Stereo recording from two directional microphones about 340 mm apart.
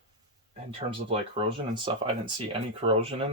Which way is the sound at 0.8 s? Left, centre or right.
Centre.